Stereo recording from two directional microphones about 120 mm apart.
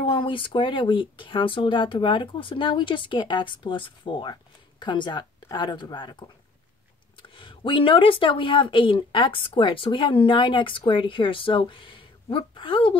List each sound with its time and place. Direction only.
0.0 s speech: 45° left (ahead or behind)